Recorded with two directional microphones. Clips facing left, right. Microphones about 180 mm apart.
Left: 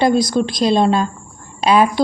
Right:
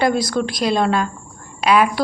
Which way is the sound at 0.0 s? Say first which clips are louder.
Left 3 dB; 20° left (ahead or behind).